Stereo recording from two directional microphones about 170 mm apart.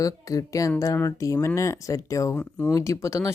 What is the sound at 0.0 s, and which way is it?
Speech, 20° left (ahead or behind).